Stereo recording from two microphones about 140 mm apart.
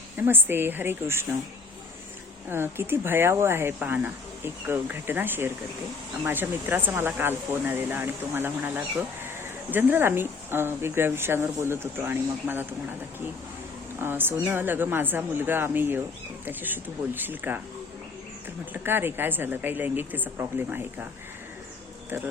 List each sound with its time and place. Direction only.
0.2 s speech: 15° right (ahead or behind)
2.5 s speech: 15° right (ahead or behind)
14.0 s speech: 15° right (ahead or behind)
18.7 s speech: 15° right (ahead or behind)
22.1 s speech: 15° right (ahead or behind)